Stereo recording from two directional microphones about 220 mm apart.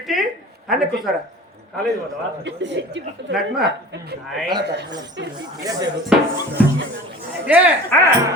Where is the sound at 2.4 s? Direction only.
55° right (ahead or behind).